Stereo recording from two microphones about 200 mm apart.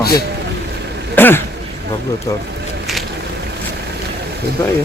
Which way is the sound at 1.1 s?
10° left (ahead or behind).